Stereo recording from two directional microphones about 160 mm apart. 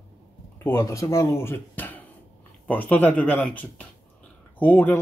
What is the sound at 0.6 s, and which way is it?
Speech, 20° left (ahead or behind).